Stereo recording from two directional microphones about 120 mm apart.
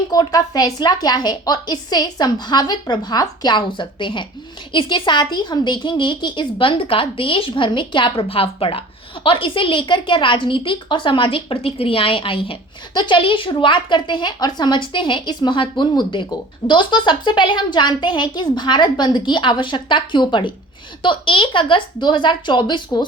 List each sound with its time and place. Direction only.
0.1 s a woman's voice: 35° left (ahead or behind)